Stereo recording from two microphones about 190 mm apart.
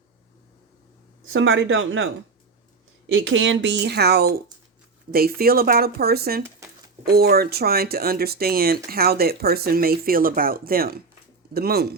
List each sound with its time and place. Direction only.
1.2 s speech: 90° right
3.1 s speech: 75° right (ahead or behind); by 11.9 s 55° right (ahead or behind)